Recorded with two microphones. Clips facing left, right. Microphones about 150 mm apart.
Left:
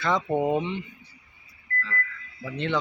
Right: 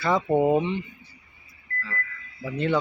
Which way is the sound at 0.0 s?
5° right (ahead or behind).